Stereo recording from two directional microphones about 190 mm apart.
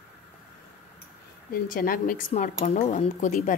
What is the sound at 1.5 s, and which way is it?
A woman's voice, 50° left (ahead or behind).